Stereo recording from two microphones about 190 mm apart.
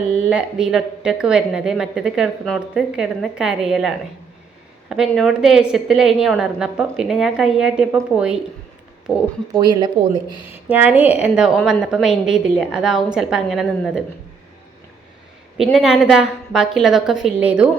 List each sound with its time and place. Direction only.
0.3 s a woman's voice: 5° right (ahead or behind)
9.6 s speech: 20° right (ahead or behind)
10.7 s a woman's voice: 10° right (ahead or behind)
15.5 s a woman's voice: centre (ahead or behind)